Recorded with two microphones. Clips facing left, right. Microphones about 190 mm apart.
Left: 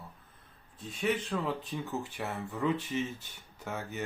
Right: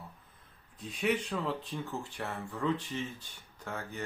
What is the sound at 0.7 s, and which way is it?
Speech, centre (ahead or behind).